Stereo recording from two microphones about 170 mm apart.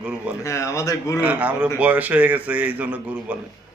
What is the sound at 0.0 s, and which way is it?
Speech, 5° right (ahead or behind).